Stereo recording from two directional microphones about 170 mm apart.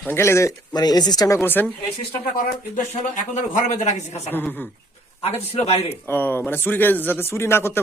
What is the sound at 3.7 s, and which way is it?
Speech, 45° left (ahead or behind).